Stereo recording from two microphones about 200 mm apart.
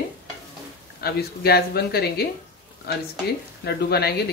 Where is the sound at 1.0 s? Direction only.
50° left (ahead or behind).